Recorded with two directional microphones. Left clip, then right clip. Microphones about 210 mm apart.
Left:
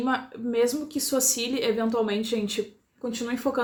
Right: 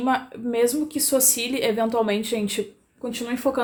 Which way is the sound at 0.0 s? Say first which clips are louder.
Right 4 dB; 25° right (ahead or behind).